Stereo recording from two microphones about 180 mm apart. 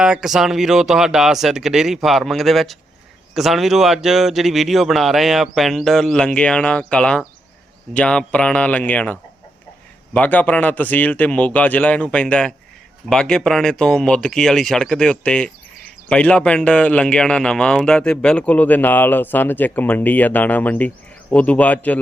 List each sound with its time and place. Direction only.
0.0 s speech: 5° right (ahead or behind)
10.2 s speech: 10° left (ahead or behind)